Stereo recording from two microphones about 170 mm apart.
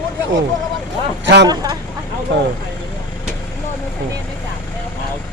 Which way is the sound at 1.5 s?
20° right (ahead or behind).